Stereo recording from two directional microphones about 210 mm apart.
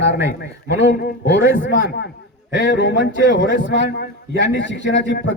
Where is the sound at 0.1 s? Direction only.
55° left (ahead or behind).